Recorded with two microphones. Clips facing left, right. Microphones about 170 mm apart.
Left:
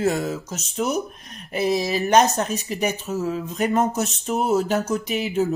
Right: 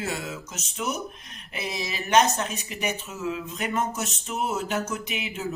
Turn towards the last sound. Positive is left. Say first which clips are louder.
# left 9 dB
turn(degrees=40)  # may be behind; listen again after turning